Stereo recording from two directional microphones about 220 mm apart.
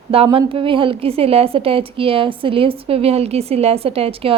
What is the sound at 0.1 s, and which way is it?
A woman's voice, 25° right (ahead or behind).